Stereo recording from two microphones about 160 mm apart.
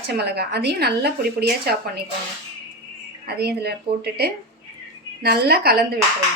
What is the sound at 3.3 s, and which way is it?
A woman's voice, 90° right.